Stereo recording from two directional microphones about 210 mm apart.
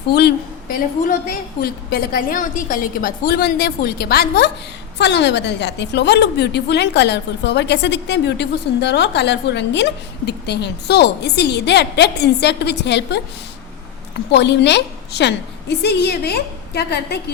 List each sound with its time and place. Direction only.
0.1 s a woman's voice: 50° left (ahead or behind)
14.3 s a woman's voice: 55° left (ahead or behind)